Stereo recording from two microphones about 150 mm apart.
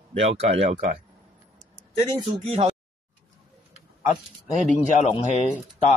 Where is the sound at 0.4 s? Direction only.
45° right (ahead or behind).